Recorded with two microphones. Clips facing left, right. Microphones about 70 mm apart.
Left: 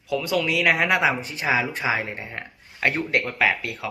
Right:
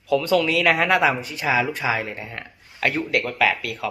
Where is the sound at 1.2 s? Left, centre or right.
Left.